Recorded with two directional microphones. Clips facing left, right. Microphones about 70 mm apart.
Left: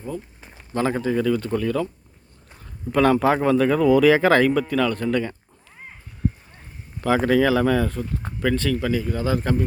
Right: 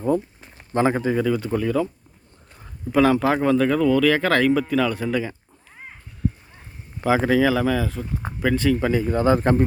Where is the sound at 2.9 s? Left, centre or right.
Centre.